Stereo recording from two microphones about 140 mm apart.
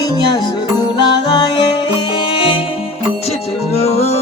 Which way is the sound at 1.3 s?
30° left (ahead or behind).